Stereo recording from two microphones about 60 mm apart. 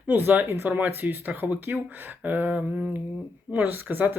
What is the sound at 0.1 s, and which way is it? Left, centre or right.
Speech, right.